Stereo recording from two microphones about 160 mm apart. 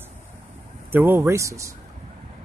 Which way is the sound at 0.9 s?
15° right (ahead or behind).